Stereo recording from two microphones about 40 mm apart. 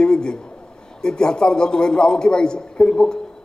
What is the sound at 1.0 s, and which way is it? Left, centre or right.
A man's voice, centre.